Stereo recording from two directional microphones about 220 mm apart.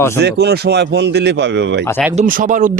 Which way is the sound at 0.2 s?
45° right (ahead or behind).